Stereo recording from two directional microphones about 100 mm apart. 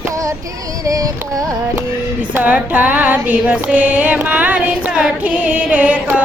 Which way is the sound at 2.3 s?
15° right (ahead or behind).